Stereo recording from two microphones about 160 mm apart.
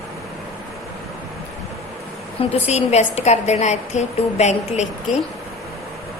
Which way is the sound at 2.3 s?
40° left (ahead or behind).